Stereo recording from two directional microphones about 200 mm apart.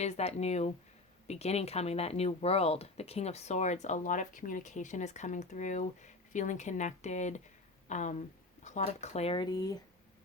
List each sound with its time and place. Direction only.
0.0 s speech: 35° left (ahead or behind)